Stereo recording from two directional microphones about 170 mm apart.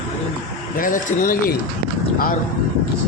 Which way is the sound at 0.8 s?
50° left (ahead or behind).